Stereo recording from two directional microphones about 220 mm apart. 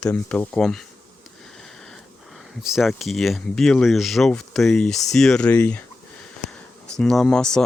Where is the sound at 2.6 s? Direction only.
Centre (ahead or behind).